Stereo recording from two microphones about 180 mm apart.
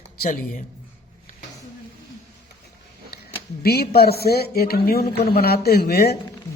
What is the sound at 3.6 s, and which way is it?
Speech, 60° left (ahead or behind).